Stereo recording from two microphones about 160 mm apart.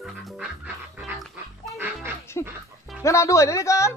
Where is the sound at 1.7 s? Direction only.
15° right (ahead or behind).